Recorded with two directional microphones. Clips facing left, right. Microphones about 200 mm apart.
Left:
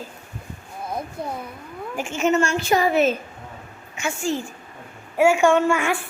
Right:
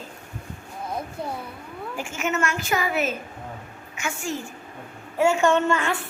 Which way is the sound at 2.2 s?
30° left (ahead or behind).